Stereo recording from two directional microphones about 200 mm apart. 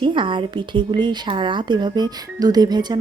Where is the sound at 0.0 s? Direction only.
25° right (ahead or behind).